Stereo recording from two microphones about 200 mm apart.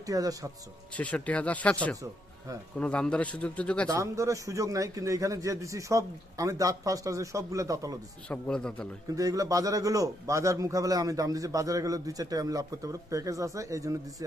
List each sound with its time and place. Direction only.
0.0 s a man's voice: 15° right (ahead or behind)
0.9 s a man's voice: 5° left (ahead or behind)
3.8 s a man's voice: 15° right (ahead or behind)
8.3 s a man's voice: 5° left (ahead or behind)
9.1 s a man's voice: 15° right (ahead or behind)